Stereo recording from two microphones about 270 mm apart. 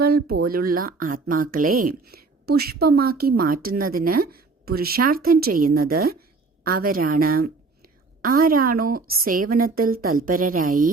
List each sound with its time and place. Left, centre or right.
0.0 s a woman's voice: right